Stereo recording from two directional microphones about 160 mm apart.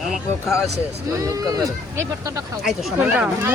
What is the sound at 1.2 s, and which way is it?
Speech, 20° right (ahead or behind).